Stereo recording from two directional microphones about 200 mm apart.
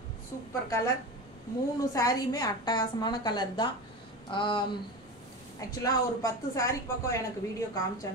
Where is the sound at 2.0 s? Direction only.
20° left (ahead or behind).